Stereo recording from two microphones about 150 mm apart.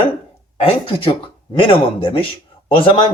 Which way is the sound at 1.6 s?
35° left (ahead or behind).